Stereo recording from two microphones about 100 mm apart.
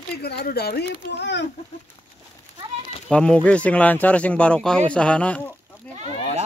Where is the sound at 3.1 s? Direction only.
10° left (ahead or behind).